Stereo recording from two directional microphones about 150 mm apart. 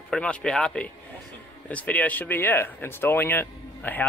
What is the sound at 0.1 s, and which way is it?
Speech, 5° left (ahead or behind).